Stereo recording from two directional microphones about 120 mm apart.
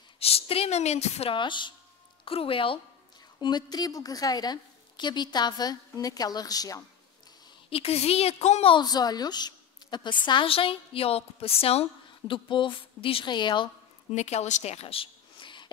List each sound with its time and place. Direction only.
0.2 s a woman's voice: 55° left (ahead or behind)
1.3 s a woman's voice: 40° left (ahead or behind)
3.3 s a woman's voice: 35° left (ahead or behind)
7.7 s a woman's voice: 60° left (ahead or behind)
8.7 s a woman's voice: 35° left (ahead or behind); by 12.4 s 55° left (ahead or behind)
12.4 s a woman's voice: 45° left (ahead or behind)
14.1 s a woman's voice: 70° left (ahead or behind); by 15.7 s 40° left (ahead or behind)